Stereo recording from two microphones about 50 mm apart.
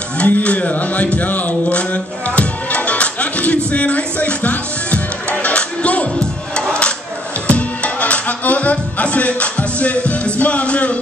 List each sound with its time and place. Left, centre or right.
0.2 s music: left
6.5 s crowd: centre
7.4 s music: left